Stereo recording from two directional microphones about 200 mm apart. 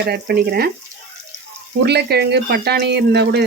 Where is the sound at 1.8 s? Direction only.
55° right (ahead or behind).